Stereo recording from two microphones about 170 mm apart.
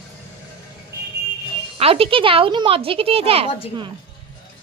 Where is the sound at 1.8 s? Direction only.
35° right (ahead or behind).